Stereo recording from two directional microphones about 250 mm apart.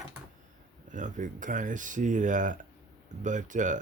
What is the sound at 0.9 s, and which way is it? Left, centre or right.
Speech, right.